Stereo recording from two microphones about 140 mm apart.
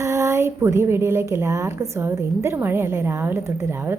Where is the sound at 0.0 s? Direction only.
20° right (ahead or behind).